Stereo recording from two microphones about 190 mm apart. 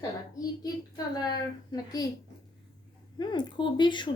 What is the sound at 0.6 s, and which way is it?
A woman's voice, 20° left (ahead or behind).